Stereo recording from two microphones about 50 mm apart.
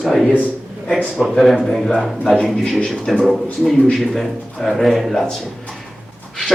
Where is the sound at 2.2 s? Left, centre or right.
Centre.